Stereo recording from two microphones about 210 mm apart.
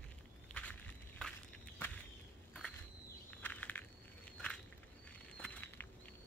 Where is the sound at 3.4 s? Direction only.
10° left (ahead or behind).